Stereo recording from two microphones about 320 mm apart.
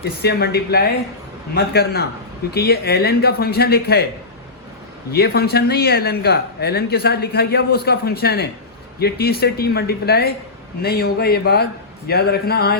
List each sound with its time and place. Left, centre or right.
0.0 s speech: left
5.1 s speech: left